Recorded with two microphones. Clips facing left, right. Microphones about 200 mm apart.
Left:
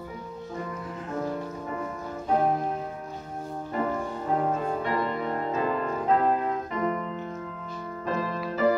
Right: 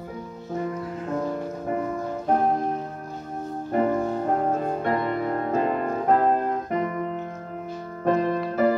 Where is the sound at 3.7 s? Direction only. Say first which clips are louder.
Right 7 dB; 50° right (ahead or behind).